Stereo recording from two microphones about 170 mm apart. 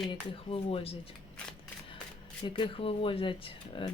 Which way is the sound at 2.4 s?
25° left (ahead or behind).